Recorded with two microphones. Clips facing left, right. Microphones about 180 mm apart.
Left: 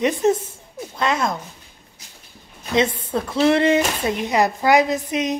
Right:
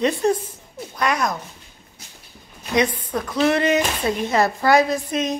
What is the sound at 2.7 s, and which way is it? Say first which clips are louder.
A woman's voice: left 1 dB; 25° left (ahead or behind).